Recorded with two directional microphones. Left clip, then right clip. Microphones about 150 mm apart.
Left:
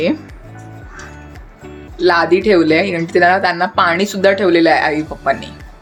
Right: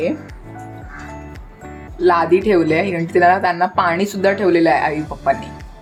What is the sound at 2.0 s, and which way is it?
A woman's voice, 25° left (ahead or behind).